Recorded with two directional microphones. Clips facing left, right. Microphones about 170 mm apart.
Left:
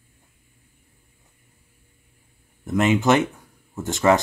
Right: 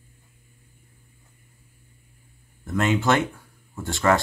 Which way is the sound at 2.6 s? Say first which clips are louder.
Left 3 dB; 20° left (ahead or behind).